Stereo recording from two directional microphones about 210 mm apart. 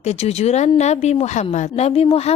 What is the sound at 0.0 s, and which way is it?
A woman's voice, 30° left (ahead or behind).